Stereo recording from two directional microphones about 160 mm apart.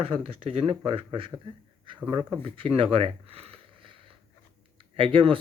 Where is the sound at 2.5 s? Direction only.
35° right (ahead or behind).